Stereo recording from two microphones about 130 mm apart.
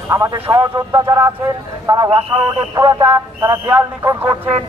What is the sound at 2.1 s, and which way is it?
Speech, 35° right (ahead or behind).